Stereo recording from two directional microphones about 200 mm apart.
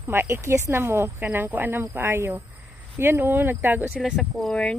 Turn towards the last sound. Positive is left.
turn(degrees=5)  # may be behind; listen again after turning